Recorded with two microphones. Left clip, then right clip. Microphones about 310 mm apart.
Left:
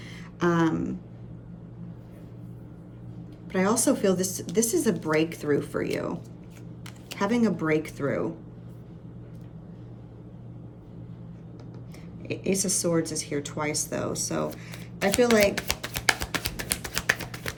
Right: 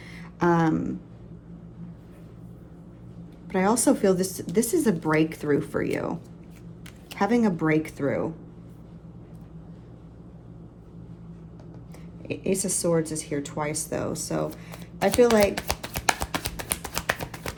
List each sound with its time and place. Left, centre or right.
0.1 s speech: centre
3.5 s speech: centre
7.2 s speech: centre
12.4 s speech: centre
15.0 s a sound: centre